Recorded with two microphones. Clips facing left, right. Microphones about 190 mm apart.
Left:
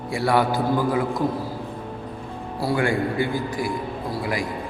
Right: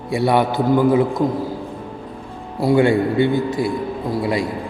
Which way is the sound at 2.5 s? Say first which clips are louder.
Right 8 dB; 20° right (ahead or behind).